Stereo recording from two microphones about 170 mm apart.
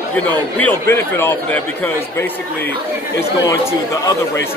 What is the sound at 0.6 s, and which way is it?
A man's voice, 10° left (ahead or behind).